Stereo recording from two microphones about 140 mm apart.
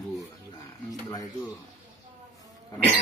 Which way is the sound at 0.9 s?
25° left (ahead or behind).